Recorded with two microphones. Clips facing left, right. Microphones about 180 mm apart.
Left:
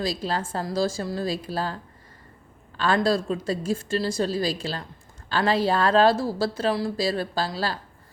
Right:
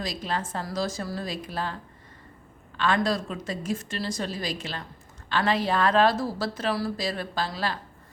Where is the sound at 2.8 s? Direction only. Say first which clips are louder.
Left 3 dB; 35° left (ahead or behind).